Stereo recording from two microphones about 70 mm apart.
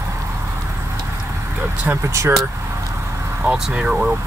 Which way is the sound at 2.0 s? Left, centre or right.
Right.